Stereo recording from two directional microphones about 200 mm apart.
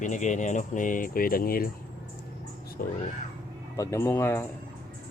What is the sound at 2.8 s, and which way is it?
Speech, 45° left (ahead or behind).